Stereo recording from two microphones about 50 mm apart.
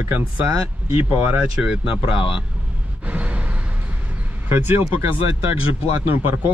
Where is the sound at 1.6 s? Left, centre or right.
Centre.